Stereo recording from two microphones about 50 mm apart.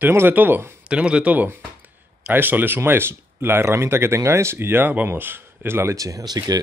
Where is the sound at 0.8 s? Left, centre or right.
Centre.